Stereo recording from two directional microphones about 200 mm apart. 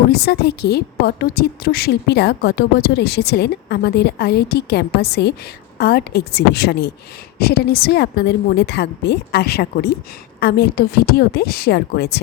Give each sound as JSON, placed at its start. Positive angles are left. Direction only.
{"t": 0.1, "sound": "a woman's voice", "side_deg": 55}